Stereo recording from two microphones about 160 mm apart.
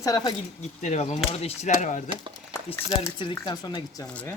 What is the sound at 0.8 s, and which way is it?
Speech, 45° left (ahead or behind).